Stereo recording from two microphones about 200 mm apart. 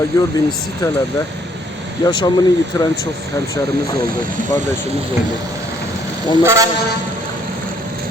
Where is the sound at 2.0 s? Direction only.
20° left (ahead or behind).